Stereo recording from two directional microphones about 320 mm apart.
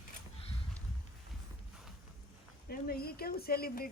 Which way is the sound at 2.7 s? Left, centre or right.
Left.